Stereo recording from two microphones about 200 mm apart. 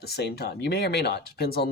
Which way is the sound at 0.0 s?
55° left (ahead or behind).